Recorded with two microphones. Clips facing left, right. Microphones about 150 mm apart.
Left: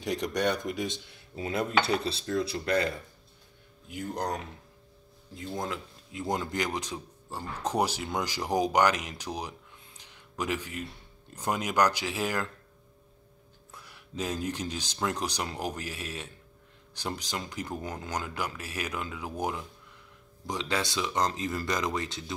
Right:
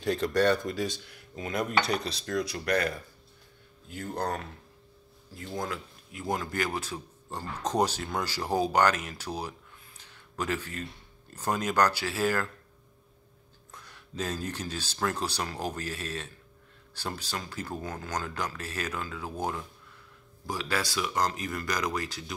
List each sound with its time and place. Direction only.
0.0 s speech: 15° left (ahead or behind)
3.9 s speech: 15° left (ahead or behind)
5.6 s a man's voice: 20° left (ahead or behind)
13.7 s speech: 10° left (ahead or behind)